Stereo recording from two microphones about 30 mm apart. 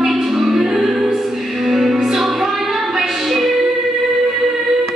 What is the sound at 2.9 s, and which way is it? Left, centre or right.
Female singing, centre.